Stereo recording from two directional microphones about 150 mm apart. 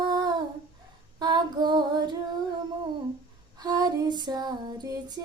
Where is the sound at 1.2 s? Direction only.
25° right (ahead or behind).